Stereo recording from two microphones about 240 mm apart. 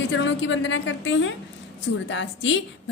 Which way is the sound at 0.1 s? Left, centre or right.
Left.